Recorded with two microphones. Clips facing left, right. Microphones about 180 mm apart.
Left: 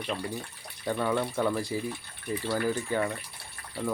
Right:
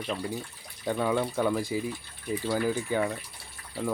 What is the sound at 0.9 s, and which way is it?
Speech, 5° right (ahead or behind).